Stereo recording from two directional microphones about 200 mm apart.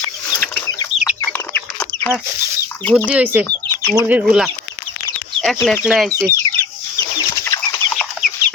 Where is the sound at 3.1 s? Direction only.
10° right (ahead or behind).